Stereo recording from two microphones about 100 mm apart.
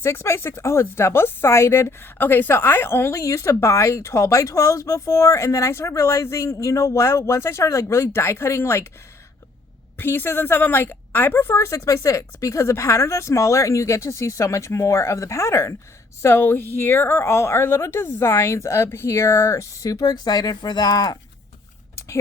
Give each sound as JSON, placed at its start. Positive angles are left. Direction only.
{"t": 0.0, "sound": "speech", "side_deg": 25}
{"t": 10.0, "sound": "speech", "side_deg": 20}